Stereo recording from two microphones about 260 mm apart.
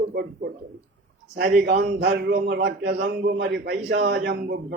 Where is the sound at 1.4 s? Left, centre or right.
Right.